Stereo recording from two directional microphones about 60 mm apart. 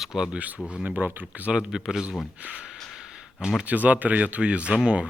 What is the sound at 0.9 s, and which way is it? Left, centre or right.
Speech, right.